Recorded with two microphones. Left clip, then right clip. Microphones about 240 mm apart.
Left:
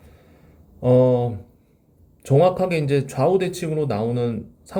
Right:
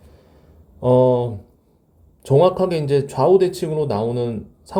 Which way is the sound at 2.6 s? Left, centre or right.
Right.